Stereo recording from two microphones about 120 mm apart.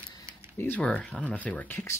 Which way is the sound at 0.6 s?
10° left (ahead or behind).